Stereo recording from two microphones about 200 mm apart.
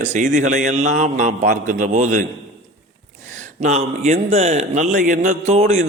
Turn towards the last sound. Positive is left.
turn(degrees=-30)  # may be behind; listen again after turning